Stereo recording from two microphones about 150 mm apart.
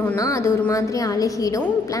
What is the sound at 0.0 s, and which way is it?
A woman's voice, 20° left (ahead or behind).